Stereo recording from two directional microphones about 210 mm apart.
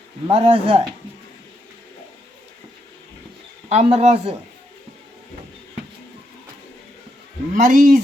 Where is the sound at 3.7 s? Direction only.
30° right (ahead or behind).